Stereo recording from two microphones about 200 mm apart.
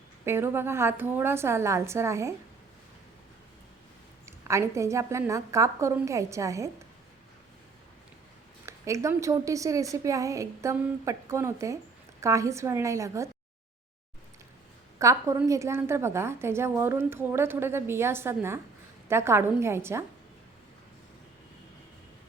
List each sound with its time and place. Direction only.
0.3 s a woman's voice: 10° right (ahead or behind)
4.3 s a woman's voice: 15° right (ahead or behind)
8.6 s a woman's voice: 15° right (ahead or behind)
14.9 s a woman's voice: 15° right (ahead or behind)